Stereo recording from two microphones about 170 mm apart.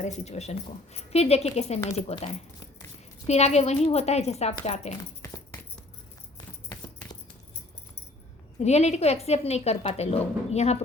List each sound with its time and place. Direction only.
0.0 s a woman's voice: 40° left (ahead or behind)
6.3 s a sound: 20° left (ahead or behind)
8.5 s a woman's voice: 40° left (ahead or behind)